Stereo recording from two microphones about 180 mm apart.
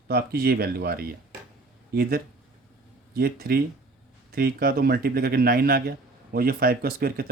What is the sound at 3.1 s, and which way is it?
A man's voice, 55° right (ahead or behind).